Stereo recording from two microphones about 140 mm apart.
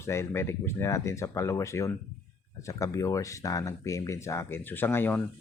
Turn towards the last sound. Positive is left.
turn(degrees=15)  # may be behind; listen again after turning